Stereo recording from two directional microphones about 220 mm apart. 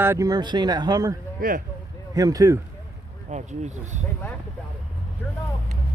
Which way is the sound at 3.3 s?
30° right (ahead or behind).